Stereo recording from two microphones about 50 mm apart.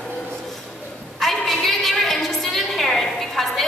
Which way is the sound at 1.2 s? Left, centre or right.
Centre.